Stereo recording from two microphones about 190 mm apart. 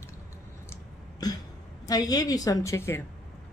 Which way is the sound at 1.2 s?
20° left (ahead or behind).